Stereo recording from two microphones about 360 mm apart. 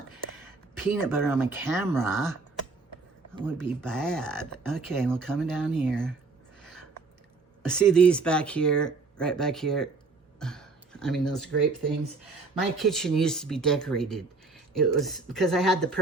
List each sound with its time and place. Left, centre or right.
0.9 s speech: centre
3.3 s speech: centre
6.6 s a sound: centre
7.7 s speech: centre
10.4 s a sound: centre
12.5 s speech: centre